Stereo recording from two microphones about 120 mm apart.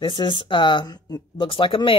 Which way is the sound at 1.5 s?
45° left (ahead or behind).